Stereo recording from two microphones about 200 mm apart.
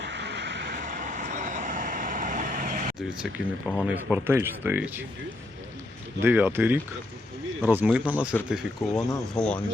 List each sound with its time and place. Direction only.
0.0 s vehicle: 60° right (ahead or behind); by 2.9 s 40° right (ahead or behind)
3.0 s speech: 5° right (ahead or behind)
6.2 s speech: 10° right (ahead or behind); by 9.6 s 5° left (ahead or behind)